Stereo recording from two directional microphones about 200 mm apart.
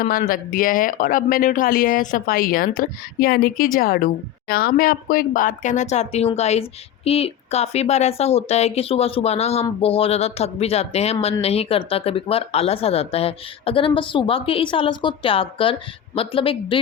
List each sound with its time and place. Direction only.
0.0 s speech: 45° left (ahead or behind); by 16.8 s 25° left (ahead or behind)